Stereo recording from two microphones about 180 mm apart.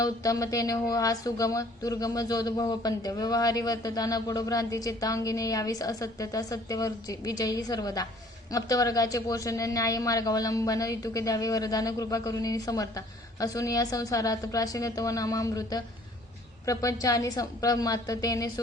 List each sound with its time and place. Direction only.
0.0 s speech: 20° left (ahead or behind)